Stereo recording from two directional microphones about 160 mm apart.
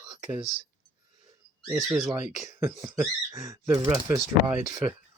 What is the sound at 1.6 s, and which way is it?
Speech, centre (ahead or behind).